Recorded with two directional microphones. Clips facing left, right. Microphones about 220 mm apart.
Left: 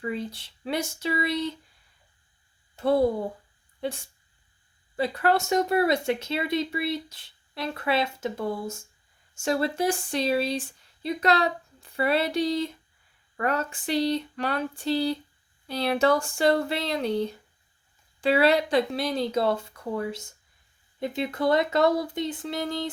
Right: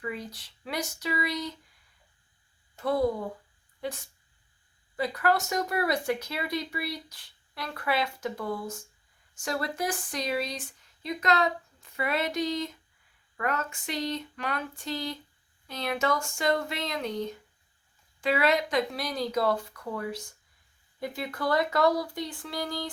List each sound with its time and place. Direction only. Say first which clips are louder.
0.0 s speech: left 5 dB; 25° left (ahead or behind)
2.7 s speech: left 4 dB; 30° left (ahead or behind)